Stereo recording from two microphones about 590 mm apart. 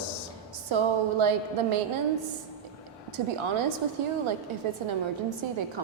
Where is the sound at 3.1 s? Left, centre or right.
Right.